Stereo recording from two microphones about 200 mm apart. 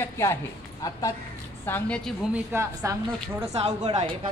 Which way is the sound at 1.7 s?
5° left (ahead or behind).